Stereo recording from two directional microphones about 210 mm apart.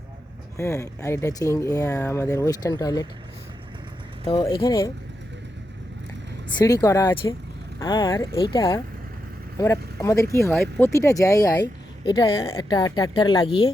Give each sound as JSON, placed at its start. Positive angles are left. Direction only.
{"t": 0.5, "sound": "speech", "side_deg": 15}
{"t": 4.3, "sound": "a woman's voice", "side_deg": 25}
{"t": 6.6, "sound": "speech", "side_deg": 15}
{"t": 10.5, "sound": "speech", "side_deg": 0}
{"t": 10.8, "sound": "a woman's voice", "side_deg": 15}